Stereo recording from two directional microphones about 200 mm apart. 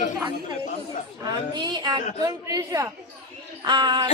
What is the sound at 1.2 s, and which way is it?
A woman's voice, 20° right (ahead or behind).